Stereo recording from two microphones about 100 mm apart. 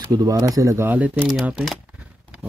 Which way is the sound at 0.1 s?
35° right (ahead or behind).